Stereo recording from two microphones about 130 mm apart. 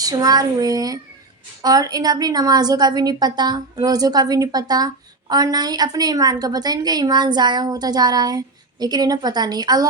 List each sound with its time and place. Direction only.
0.0 s a woman's voice: 30° right (ahead or behind)